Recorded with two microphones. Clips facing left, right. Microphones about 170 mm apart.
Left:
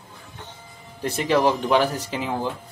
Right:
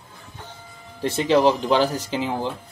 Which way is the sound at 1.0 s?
25° right (ahead or behind).